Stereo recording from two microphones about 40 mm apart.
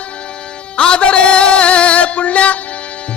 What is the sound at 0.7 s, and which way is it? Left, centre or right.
Music, left.